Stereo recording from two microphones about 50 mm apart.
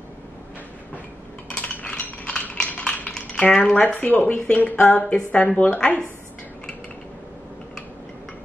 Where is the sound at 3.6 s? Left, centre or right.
Left.